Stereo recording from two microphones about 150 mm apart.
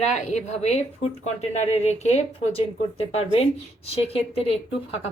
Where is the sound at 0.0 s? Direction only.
50° left (ahead or behind).